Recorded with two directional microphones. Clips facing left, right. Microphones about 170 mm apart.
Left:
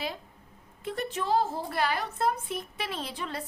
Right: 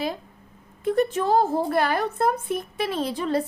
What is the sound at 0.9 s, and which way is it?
A woman's voice, 50° right (ahead or behind).